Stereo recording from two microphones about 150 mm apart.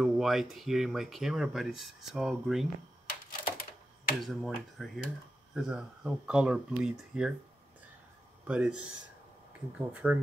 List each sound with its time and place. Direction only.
0.0 s speech: centre (ahead or behind)
3.3 s typewriter: 70° left (ahead or behind)
4.2 s speech: centre (ahead or behind)
8.5 s speech: 5° right (ahead or behind)